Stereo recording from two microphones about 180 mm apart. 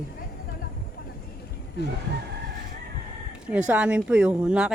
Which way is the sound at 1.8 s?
65° left (ahead or behind).